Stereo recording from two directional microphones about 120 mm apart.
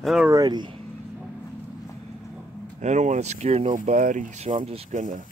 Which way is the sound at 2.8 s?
85° right.